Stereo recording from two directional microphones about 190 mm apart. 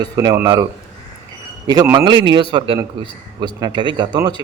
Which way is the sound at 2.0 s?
25° right (ahead or behind).